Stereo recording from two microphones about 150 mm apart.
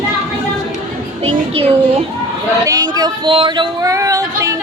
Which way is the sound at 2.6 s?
20° right (ahead or behind).